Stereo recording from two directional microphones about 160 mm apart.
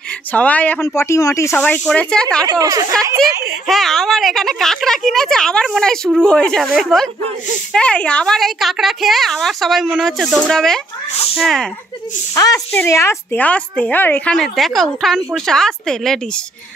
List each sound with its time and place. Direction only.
0.3 s a woman's voice: 10° left (ahead or behind)
2.4 s speech: 25° right (ahead or behind)
3.4 s a woman's voice: centre (ahead or behind)
12.4 s a woman's voice: 20° left (ahead or behind); by 16.2 s 5° left (ahead or behind)